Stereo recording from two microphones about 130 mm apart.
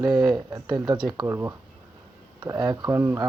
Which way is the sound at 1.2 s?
20° right (ahead or behind).